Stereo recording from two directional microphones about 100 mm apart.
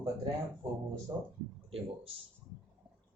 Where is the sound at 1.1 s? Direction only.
25° right (ahead or behind).